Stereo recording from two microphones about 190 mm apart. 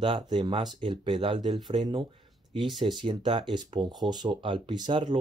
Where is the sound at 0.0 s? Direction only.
25° right (ahead or behind).